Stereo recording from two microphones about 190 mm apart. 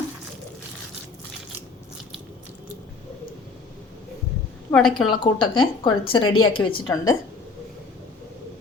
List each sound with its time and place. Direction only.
4.7 s a woman's voice: 5° left (ahead or behind)
5.1 s speech: 25° left (ahead or behind)